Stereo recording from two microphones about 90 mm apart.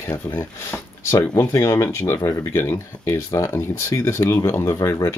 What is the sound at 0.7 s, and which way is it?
Speech, 35° left (ahead or behind).